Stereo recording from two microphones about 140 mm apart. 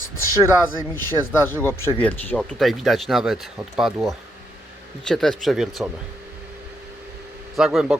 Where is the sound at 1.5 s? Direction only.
15° left (ahead or behind).